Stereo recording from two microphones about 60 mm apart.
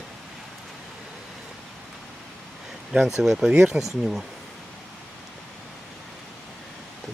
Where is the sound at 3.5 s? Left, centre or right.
Centre.